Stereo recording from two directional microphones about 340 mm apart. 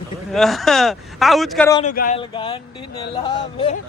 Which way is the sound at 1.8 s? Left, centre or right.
Left.